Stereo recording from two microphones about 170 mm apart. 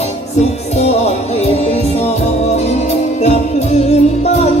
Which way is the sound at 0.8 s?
40° left (ahead or behind).